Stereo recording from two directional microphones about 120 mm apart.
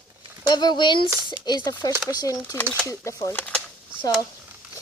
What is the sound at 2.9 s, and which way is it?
Speech, 25° left (ahead or behind).